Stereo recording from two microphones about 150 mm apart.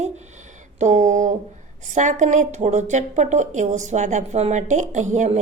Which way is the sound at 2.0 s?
55° right (ahead or behind).